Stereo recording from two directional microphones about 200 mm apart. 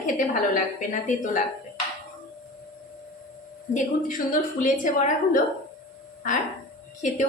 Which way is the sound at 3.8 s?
40° left (ahead or behind).